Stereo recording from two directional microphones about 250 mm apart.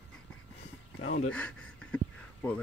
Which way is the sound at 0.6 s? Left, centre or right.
Left.